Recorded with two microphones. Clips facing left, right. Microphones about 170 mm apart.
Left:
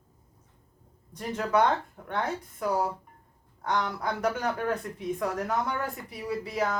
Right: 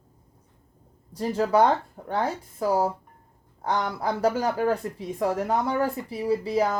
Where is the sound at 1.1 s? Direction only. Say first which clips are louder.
Right 5 dB; 30° right (ahead or behind).